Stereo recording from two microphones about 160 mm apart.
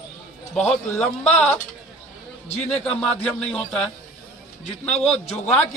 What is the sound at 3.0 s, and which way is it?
Music, 5° left (ahead or behind).